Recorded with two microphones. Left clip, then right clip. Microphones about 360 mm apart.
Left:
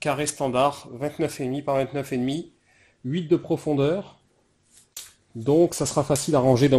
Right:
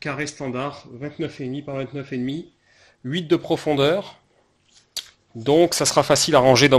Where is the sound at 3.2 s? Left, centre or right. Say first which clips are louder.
Right 3 dB; right.